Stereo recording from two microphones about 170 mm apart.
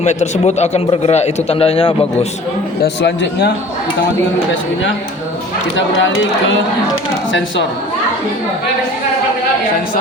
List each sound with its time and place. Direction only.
0.0 s a man's voice: 40° left (ahead or behind)
2.8 s speech: 80° left
5.7 s speech: 90° left